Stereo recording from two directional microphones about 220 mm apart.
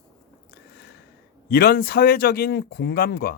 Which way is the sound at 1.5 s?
45° left (ahead or behind).